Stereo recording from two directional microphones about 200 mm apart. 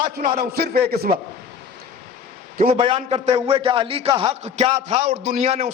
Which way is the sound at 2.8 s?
25° right (ahead or behind).